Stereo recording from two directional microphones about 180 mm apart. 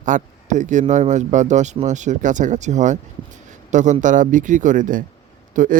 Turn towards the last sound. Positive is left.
turn(degrees=-45)  # may be behind; listen again after turning